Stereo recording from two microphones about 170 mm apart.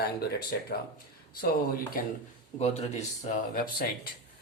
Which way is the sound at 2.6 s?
40° left (ahead or behind).